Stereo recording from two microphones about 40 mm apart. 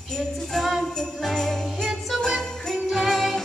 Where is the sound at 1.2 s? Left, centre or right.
Centre.